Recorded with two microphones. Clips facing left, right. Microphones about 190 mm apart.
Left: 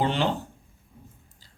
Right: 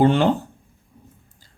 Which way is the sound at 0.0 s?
50° right (ahead or behind).